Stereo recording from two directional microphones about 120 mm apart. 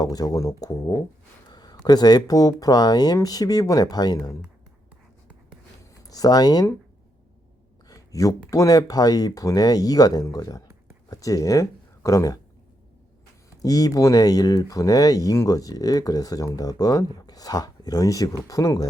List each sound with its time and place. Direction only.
0.0 s speech: 30° left (ahead or behind)
5.8 s speech: 30° left (ahead or behind)
7.9 s a sound: 30° left (ahead or behind)
8.4 s speech: 25° left (ahead or behind)
13.6 s speech: 30° left (ahead or behind)